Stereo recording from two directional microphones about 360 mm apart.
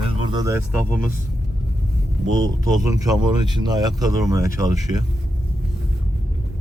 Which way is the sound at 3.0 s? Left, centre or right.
Centre.